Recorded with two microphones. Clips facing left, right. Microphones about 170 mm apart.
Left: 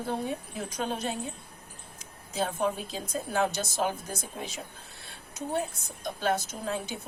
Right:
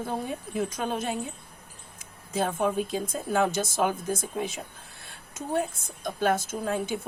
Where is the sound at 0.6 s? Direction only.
50° right (ahead or behind).